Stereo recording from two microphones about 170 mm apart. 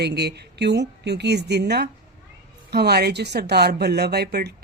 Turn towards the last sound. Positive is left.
turn(degrees=-70)  # may be behind; listen again after turning